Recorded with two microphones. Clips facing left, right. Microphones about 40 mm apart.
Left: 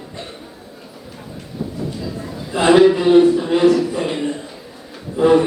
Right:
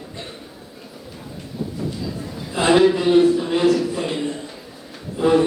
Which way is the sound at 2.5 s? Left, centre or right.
Centre.